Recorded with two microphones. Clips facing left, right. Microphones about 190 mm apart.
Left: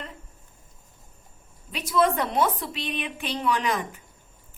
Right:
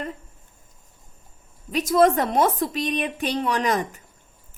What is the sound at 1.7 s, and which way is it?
A woman's voice, 45° right (ahead or behind).